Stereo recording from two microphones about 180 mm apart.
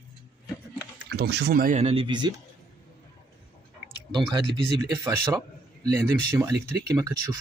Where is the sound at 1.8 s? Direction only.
30° right (ahead or behind).